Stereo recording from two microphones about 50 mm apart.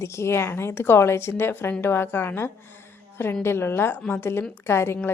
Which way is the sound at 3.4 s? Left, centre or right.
Left.